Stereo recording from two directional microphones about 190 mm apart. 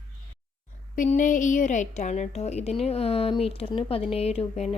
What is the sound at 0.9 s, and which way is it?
Speech, 40° left (ahead or behind).